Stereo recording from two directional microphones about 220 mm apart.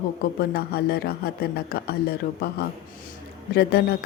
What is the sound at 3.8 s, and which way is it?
Speech, 45° left (ahead or behind).